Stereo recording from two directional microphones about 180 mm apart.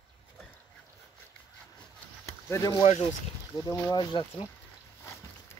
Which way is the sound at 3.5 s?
20° left (ahead or behind).